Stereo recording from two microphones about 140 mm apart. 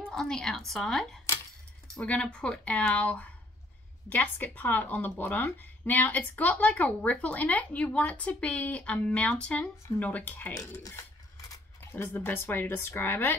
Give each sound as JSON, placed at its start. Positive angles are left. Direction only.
{"t": 0.1, "sound": "a woman's voice", "side_deg": 5}